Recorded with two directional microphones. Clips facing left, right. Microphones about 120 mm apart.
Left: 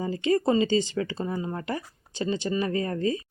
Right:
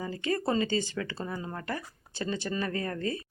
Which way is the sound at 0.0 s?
20° left (ahead or behind).